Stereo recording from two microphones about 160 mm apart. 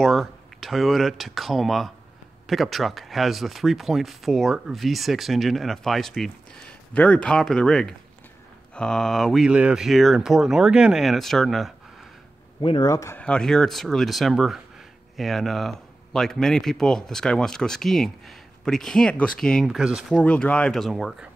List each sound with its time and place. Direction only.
0.0 s speech: centre (ahead or behind)
12.6 s speech: 25° left (ahead or behind)
13.2 s speech: 5° left (ahead or behind)